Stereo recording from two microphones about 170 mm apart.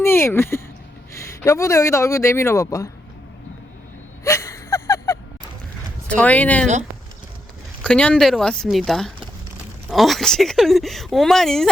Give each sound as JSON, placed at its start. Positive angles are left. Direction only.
{"t": 0.0, "sound": "speech", "side_deg": 15}
{"t": 4.2, "sound": "wheeze", "side_deg": 15}
{"t": 6.1, "sound": "speech", "side_deg": 5}
{"t": 7.9, "sound": "speech", "side_deg": 5}